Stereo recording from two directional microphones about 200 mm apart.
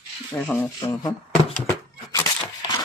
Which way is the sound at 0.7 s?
20° left (ahead or behind).